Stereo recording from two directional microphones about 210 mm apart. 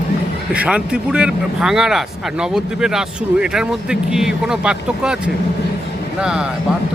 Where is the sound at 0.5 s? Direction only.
5° right (ahead or behind).